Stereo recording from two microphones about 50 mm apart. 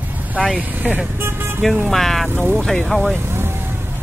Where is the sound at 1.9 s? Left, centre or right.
Centre.